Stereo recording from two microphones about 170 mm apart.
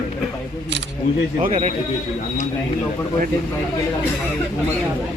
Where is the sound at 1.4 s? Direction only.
45° right (ahead or behind).